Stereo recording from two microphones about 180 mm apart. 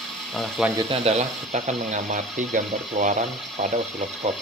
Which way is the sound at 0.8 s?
35° right (ahead or behind).